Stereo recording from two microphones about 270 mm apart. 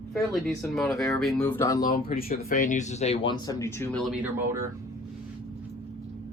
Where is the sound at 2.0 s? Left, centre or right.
Left; by 4.7 s centre.